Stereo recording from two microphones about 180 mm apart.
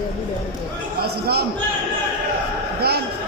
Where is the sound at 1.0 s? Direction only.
60° right (ahead or behind).